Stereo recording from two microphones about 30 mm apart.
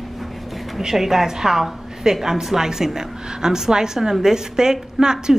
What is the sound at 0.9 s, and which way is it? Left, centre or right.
A woman's voice, centre.